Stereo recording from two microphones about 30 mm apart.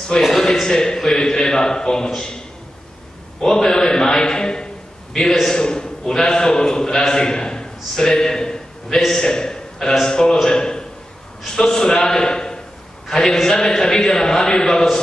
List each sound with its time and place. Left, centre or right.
0.1 s a man's voice: left